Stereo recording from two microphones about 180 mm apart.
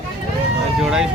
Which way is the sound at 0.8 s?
5° right (ahead or behind).